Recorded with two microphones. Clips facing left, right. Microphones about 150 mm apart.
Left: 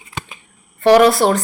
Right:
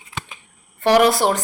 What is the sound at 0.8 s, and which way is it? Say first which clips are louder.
Speech: left 4 dB; 15° right (ahead or behind).